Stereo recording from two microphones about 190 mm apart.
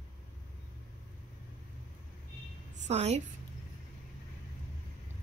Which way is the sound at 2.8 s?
35° right (ahead or behind).